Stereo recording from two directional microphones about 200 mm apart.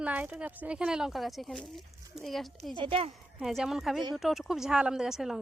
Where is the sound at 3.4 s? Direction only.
Centre (ahead or behind).